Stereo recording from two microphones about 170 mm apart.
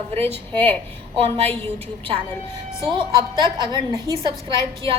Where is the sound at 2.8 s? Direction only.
25° right (ahead or behind).